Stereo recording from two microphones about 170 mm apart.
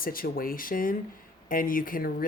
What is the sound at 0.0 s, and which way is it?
Speech, 55° left (ahead or behind).